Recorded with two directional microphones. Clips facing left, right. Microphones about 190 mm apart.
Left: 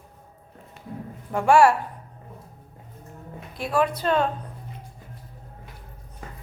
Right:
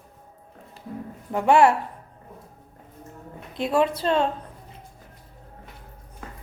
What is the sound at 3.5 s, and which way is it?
Speech, 25° right (ahead or behind).